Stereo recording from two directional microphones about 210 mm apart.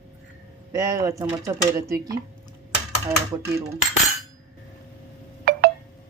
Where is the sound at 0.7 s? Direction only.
15° right (ahead or behind).